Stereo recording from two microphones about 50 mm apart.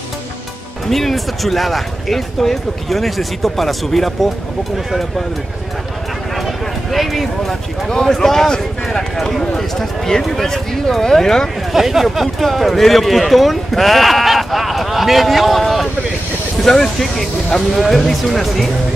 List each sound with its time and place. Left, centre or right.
0.8 s speech: centre
6.3 s a sound: centre
7.9 s speech: centre
11.7 s speech: centre